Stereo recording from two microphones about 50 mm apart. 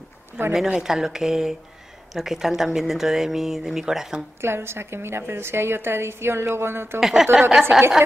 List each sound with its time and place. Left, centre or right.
0.5 s speech: centre
4.4 s a woman's voice: right
7.0 s speech: centre